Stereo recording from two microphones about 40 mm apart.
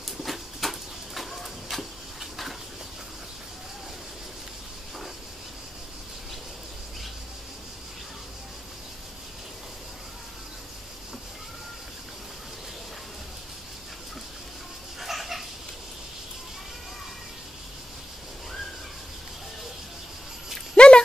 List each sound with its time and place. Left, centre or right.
0.2 s a sound: centre
15.0 s cat: centre
20.7 s dog: left